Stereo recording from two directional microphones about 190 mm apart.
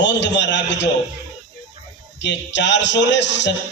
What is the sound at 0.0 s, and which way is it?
Speech, 70° left (ahead or behind).